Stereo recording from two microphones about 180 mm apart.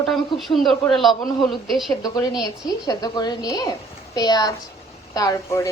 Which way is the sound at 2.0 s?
20° left (ahead or behind).